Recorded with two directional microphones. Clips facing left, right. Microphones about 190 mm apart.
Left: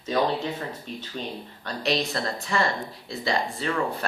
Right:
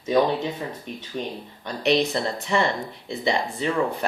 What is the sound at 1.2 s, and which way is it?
Speech, 20° right (ahead or behind).